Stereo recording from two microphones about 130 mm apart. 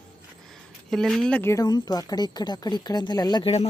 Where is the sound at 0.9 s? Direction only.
5° left (ahead or behind).